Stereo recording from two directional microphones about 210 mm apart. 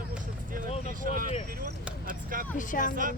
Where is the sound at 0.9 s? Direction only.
40° right (ahead or behind).